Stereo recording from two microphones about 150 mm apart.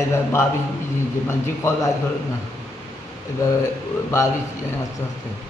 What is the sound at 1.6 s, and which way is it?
Speech, 20° left (ahead or behind).